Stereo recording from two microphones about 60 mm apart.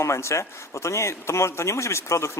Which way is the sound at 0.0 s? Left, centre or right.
Left.